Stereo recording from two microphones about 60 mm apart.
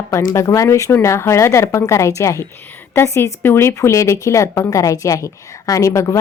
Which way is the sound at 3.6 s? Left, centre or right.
Left.